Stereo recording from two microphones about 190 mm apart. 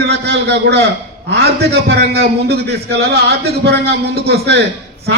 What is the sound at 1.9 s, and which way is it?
A man's voice, 55° right (ahead or behind).